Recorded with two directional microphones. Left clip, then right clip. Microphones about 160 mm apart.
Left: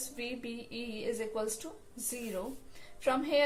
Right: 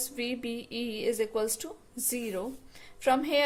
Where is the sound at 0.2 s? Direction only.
75° right (ahead or behind).